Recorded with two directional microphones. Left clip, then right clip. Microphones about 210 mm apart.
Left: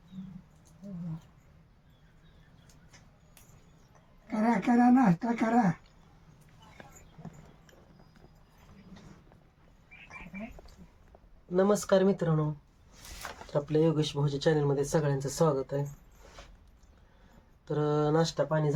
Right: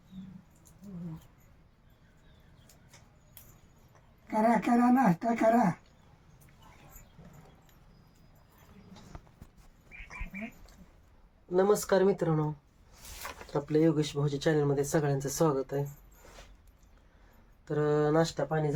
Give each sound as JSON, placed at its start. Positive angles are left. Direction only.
{"t": 4.3, "sound": "speech", "side_deg": -5}
{"t": 11.5, "sound": "speech", "side_deg": -10}
{"t": 13.5, "sound": "speech", "side_deg": -5}
{"t": 17.7, "sound": "speech", "side_deg": -10}